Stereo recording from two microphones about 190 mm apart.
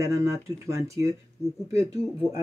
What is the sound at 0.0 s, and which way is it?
Speech, 15° right (ahead or behind).